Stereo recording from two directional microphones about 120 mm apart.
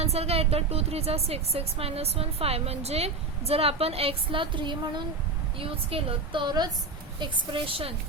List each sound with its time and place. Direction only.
0.0 s a woman's voice: 60° right (ahead or behind); by 5.0 s 40° right (ahead or behind)
5.5 s a woman's voice: 50° right (ahead or behind)